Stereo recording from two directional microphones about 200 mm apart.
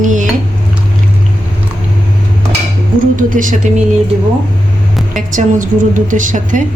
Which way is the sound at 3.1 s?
40° right (ahead or behind).